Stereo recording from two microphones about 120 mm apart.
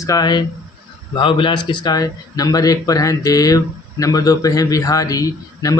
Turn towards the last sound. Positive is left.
turn(degrees=30)  # may be behind; listen again after turning